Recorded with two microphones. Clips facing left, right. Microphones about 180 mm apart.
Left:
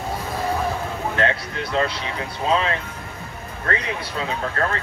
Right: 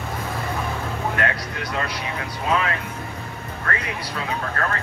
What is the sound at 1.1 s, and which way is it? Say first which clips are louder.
Speech: left 3 dB; 25° left (ahead or behind).